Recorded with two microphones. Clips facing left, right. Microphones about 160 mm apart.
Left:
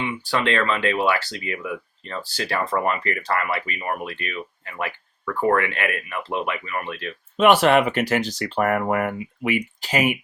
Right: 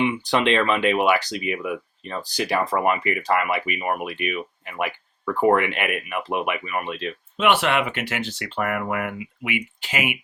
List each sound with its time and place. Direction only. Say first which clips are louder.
0.0 s speech: right 3 dB; 20° right (ahead or behind)
7.3 s speech: left 5 dB; 40° left (ahead or behind)